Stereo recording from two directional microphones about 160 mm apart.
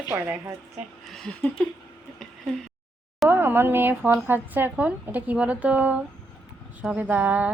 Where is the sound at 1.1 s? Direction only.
5° left (ahead or behind).